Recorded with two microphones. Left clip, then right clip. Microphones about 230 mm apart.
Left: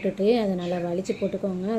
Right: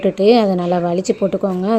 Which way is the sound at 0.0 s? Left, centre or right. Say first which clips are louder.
Right 10 dB; right.